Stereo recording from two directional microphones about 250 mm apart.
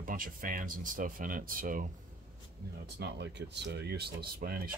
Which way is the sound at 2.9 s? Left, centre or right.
Right.